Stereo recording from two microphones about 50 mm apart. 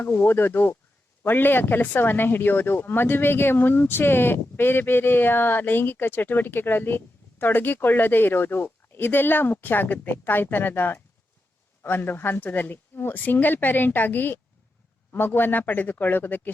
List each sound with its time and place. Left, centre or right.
0.1 s speech: left